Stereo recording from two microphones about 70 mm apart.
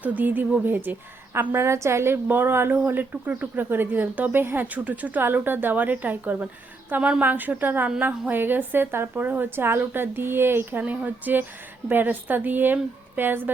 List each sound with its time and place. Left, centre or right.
0.0 s a woman's voice: right